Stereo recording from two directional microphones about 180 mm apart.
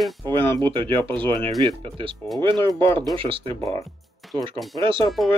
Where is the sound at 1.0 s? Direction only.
10° left (ahead or behind).